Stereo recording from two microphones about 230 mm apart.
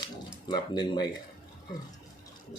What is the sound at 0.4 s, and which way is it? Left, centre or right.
Speech, centre.